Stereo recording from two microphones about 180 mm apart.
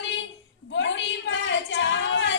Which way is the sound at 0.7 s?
90° left.